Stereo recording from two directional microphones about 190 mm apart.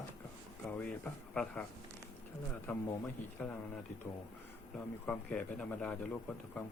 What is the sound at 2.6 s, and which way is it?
Speech, 15° left (ahead or behind).